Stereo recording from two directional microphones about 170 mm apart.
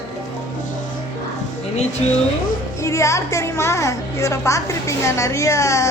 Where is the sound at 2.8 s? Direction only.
15° left (ahead or behind).